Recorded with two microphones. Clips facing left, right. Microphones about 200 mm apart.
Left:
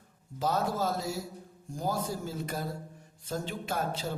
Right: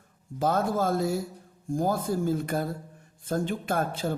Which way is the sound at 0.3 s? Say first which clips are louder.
Right 4 dB; 50° right (ahead or behind).